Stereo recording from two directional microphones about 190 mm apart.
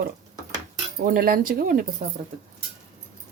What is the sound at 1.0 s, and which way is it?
Speech, 45° right (ahead or behind).